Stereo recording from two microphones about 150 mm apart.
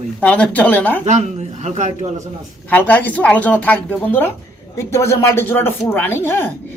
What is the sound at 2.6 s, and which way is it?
Speech, 10° left (ahead or behind).